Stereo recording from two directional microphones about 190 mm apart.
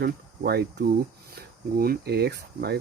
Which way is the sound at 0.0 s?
55° right (ahead or behind).